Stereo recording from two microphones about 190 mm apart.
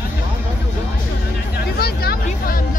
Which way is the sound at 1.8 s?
55° left (ahead or behind).